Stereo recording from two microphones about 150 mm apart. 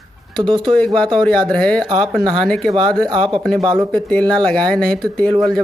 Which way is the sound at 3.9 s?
5° left (ahead or behind).